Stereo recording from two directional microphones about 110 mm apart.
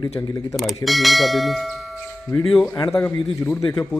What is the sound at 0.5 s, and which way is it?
Speech, centre (ahead or behind).